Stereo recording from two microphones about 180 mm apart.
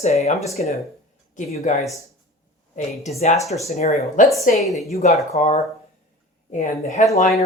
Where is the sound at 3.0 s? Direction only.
40° left (ahead or behind).